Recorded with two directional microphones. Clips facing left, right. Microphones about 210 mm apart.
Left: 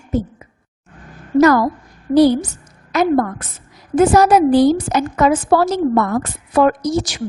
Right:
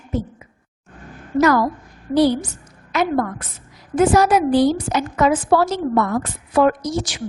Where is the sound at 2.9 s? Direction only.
40° left (ahead or behind).